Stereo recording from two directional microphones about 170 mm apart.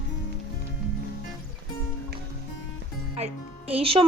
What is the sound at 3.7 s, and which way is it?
Speech, 35° right (ahead or behind).